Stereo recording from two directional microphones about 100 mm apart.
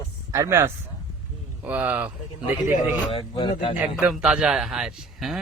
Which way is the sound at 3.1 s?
60° left (ahead or behind).